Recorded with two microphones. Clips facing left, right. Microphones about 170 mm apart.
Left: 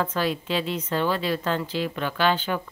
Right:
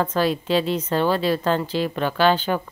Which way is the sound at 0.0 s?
35° right (ahead or behind).